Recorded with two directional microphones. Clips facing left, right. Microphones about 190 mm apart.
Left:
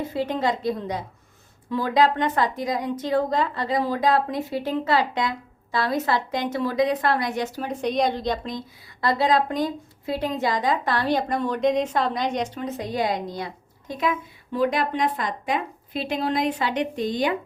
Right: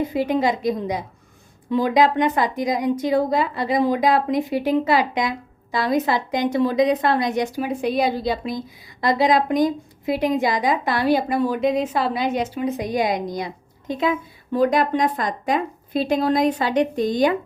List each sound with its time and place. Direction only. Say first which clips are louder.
0.0 s a woman's voice: right 4 dB; 15° right (ahead or behind)
14.5 s a woman's voice: right 5 dB; 45° right (ahead or behind)